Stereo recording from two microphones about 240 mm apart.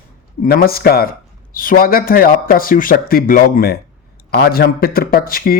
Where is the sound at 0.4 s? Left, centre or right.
Left.